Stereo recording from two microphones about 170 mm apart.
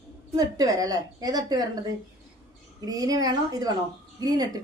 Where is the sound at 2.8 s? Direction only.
20° right (ahead or behind).